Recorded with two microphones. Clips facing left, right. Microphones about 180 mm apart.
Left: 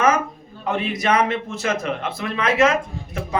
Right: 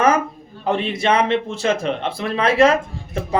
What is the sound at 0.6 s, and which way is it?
A man's voice, 30° right (ahead or behind).